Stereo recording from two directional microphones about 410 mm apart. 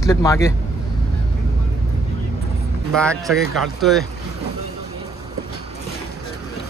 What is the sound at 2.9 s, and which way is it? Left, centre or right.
Speech, centre.